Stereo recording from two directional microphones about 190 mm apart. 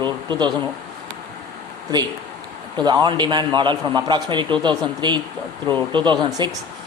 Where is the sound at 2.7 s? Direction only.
20° right (ahead or behind).